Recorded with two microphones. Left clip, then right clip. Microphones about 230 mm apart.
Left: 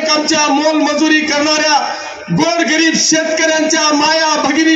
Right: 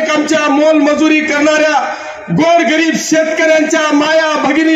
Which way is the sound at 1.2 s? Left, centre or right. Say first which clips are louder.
Right 3 dB; left.